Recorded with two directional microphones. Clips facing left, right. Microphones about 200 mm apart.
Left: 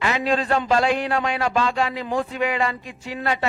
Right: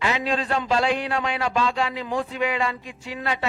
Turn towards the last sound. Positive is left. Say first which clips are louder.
# left 3 dB
turn(degrees=45)  # may be behind; listen again after turning